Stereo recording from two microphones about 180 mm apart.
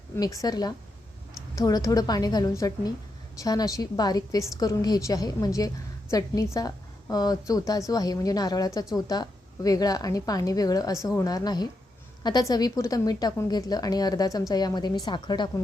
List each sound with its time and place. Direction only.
0.2 s a woman's voice: 20° left (ahead or behind)